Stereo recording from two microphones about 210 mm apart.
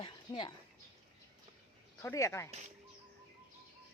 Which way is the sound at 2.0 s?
15° left (ahead or behind).